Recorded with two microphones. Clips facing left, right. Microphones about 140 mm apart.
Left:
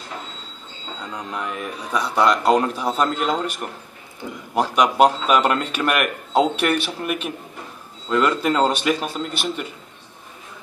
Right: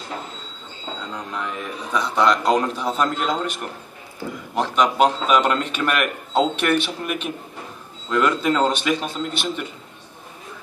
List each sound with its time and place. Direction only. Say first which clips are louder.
1.1 s speech: left 2 dB; 5° left (ahead or behind)